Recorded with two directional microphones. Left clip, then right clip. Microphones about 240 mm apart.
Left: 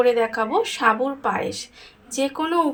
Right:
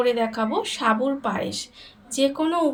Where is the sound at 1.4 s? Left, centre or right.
Left.